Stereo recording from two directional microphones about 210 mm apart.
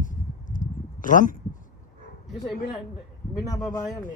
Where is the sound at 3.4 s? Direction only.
15° left (ahead or behind).